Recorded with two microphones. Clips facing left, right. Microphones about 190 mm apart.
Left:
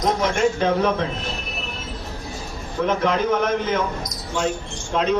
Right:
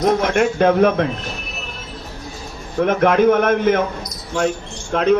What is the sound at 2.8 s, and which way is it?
A man's voice, 55° right (ahead or behind).